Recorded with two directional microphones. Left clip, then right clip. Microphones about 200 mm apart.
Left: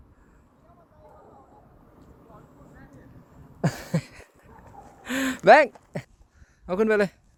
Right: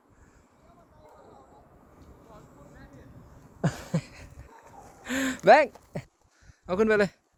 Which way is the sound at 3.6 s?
20° left (ahead or behind).